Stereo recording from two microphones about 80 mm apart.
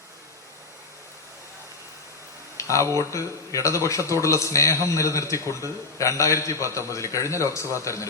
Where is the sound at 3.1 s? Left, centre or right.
Left.